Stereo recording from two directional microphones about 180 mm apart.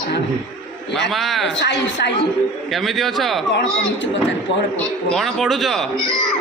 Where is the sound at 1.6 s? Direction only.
75° left (ahead or behind).